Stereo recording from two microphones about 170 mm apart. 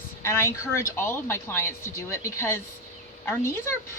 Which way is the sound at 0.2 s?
15° left (ahead or behind).